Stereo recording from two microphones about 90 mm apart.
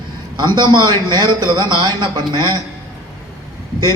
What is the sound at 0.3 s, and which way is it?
A man's voice, 55° right (ahead or behind).